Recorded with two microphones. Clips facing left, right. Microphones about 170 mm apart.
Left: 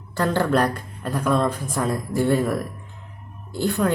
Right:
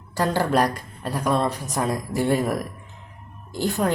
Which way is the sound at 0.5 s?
10° right (ahead or behind).